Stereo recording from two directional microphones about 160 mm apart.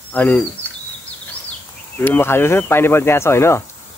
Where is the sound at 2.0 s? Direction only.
15° left (ahead or behind).